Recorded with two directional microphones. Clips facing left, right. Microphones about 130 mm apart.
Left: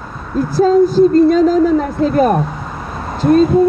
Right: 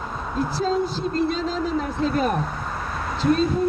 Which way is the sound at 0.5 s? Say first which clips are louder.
Left 17 dB; 45° left (ahead or behind).